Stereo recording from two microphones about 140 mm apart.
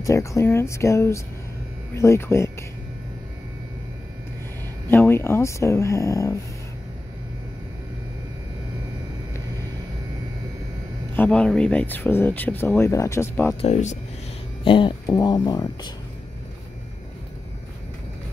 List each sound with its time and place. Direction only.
0.0 s speech: 20° left (ahead or behind)
4.8 s speech: 15° left (ahead or behind)
11.1 s speech: 5° left (ahead or behind)
13.6 s speech: 55° left (ahead or behind)
14.6 s speech: 35° left (ahead or behind)